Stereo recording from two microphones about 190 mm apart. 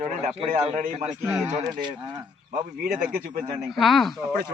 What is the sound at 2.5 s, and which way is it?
Speech, 45° right (ahead or behind).